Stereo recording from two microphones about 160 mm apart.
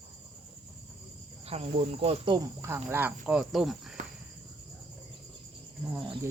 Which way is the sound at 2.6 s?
15° right (ahead or behind).